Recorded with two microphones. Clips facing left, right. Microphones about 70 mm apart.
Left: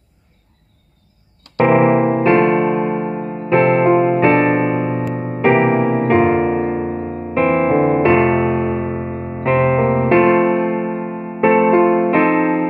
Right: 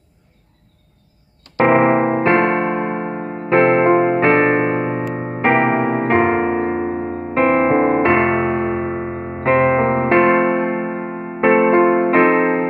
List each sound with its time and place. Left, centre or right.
1.7 s electric piano: right
5.1 s music: right